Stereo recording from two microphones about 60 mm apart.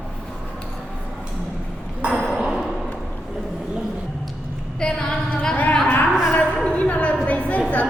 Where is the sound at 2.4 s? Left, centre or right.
Centre.